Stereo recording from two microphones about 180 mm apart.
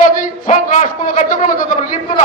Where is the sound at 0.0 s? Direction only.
50° left (ahead or behind).